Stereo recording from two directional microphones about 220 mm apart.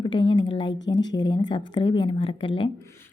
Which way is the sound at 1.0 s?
20° left (ahead or behind).